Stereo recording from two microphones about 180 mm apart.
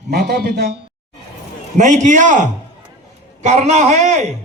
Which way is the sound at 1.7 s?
45° right (ahead or behind).